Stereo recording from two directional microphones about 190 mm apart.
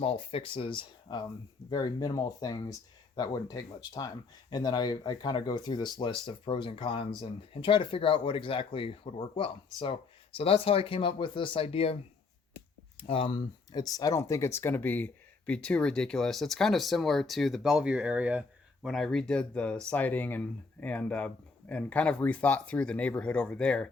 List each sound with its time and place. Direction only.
0.0 s speech: 30° left (ahead or behind)
13.0 s speech: 30° left (ahead or behind); by 23.9 s 5° left (ahead or behind)